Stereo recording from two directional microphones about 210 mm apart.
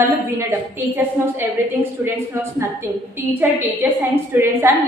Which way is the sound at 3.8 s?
10° right (ahead or behind).